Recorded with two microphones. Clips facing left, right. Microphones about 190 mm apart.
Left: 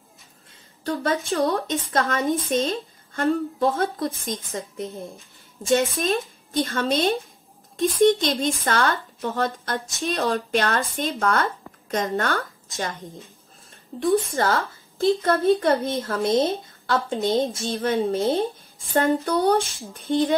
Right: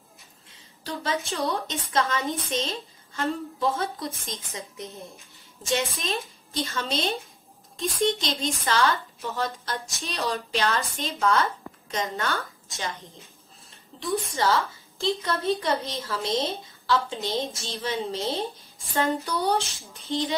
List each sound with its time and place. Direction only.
0.5 s a woman's voice: 50° left (ahead or behind)